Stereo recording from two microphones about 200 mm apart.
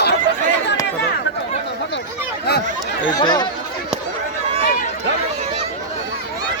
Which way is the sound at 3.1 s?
20° left (ahead or behind).